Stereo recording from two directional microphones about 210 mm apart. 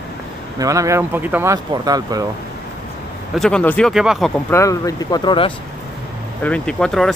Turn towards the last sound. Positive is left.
turn(degrees=0)  # may be behind; listen again after turning